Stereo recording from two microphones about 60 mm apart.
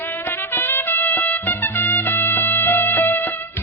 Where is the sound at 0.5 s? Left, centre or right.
Left.